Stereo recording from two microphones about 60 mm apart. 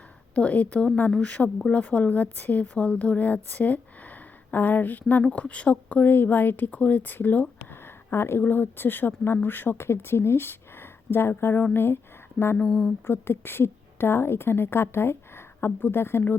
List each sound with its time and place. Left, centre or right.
0.3 s a woman's voice: left
12.5 s a sound: centre
13.1 s a woman's voice: left